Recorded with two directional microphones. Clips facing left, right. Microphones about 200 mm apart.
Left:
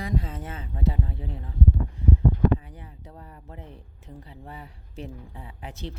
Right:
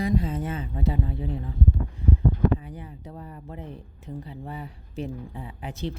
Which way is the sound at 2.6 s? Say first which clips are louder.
Right 6 dB; 20° right (ahead or behind).